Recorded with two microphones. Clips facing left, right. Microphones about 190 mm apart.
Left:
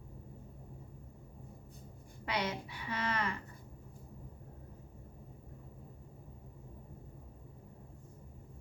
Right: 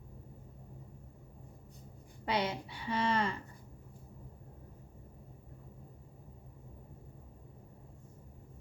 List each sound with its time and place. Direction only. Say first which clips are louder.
2.2 s a woman's voice: right 3 dB; 30° right (ahead or behind)